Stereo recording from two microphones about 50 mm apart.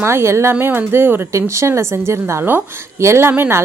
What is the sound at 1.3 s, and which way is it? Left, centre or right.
Speech, right.